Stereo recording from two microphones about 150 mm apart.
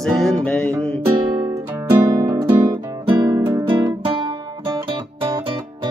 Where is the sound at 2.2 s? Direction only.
30° right (ahead or behind).